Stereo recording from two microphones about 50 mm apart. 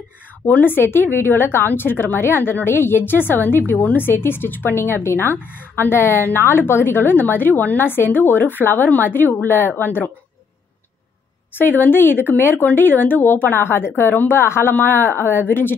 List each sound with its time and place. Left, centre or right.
0.5 s a woman's voice: left
11.5 s a woman's voice: left
14.4 s a woman's voice: left